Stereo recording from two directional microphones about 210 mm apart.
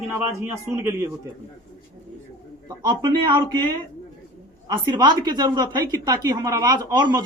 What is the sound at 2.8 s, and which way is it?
Speech, 20° right (ahead or behind).